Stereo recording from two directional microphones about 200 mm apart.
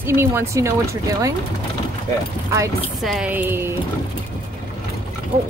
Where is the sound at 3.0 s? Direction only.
5° right (ahead or behind).